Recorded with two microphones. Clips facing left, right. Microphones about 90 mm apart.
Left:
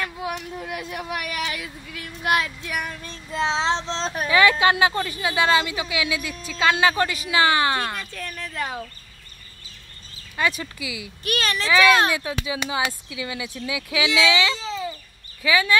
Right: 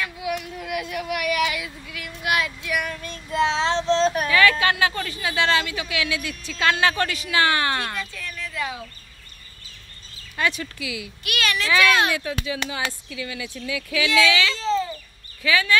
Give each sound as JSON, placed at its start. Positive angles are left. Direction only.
{"t": 0.0, "sound": "speech", "side_deg": 35}
{"t": 8.0, "sound": "a sound", "side_deg": 45}
{"t": 10.3, "sound": "speech", "side_deg": 5}
{"t": 11.2, "sound": "a child's voice", "side_deg": 35}
{"t": 12.4, "sound": "speech", "side_deg": 15}